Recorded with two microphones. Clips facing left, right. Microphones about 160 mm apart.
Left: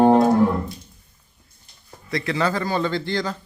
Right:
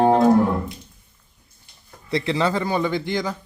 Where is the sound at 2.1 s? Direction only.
25° right (ahead or behind).